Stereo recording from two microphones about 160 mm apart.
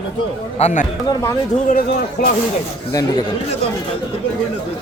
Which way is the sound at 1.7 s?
65° left (ahead or behind).